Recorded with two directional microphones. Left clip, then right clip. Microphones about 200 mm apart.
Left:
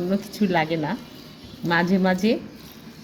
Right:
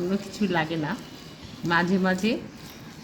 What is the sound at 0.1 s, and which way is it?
Speech, 20° left (ahead or behind).